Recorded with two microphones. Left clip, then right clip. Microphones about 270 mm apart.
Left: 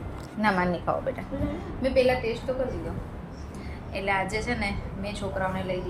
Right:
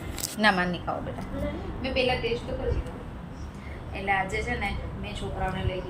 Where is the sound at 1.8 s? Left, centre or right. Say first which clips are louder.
Left 5 dB; left.